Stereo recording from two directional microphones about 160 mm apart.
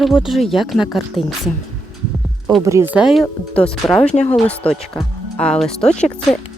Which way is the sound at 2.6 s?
20° right (ahead or behind).